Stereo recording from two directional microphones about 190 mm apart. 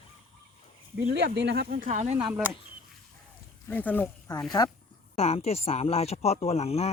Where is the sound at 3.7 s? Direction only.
10° left (ahead or behind).